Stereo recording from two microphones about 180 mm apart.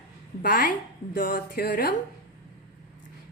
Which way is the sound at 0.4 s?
50° left (ahead or behind).